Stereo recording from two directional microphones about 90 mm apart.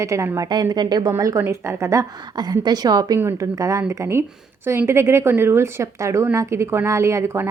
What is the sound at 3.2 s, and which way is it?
A woman's voice, 35° right (ahead or behind).